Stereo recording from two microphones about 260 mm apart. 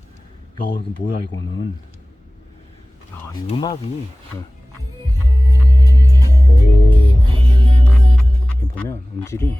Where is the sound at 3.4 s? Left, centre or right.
Centre.